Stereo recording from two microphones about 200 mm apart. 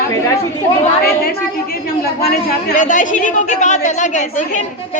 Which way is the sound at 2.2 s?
45° left (ahead or behind).